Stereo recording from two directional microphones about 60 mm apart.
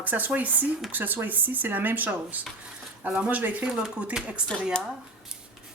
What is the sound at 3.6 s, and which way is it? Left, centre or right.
Speech, centre.